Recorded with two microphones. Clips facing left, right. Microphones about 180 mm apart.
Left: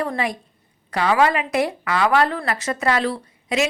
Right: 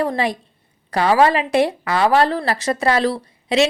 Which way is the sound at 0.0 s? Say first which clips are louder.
Right 4 dB; 30° right (ahead or behind).